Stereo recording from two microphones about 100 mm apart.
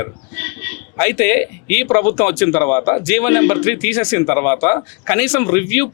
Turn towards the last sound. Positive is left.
turn(degrees=25)  # may be behind; listen again after turning